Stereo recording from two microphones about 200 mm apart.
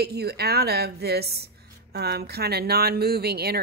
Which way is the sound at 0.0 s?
50° right (ahead or behind).